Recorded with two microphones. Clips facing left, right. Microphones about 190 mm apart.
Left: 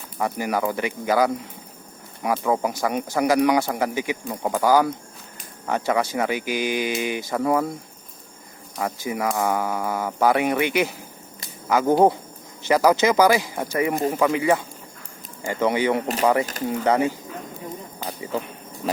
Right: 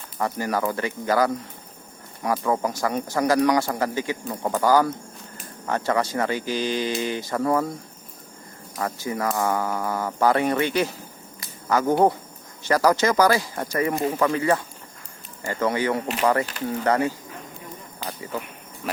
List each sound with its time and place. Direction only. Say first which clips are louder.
0.2 s speech: left 1 dB; 10° left (ahead or behind)
8.8 s speech: left 1 dB; 15° left (ahead or behind)